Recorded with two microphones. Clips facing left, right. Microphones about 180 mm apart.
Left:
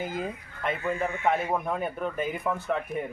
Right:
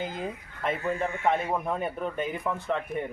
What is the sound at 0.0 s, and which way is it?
Speech, 5° left (ahead or behind).